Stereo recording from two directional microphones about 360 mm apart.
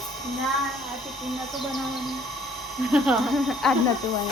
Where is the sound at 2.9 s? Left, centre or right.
Centre.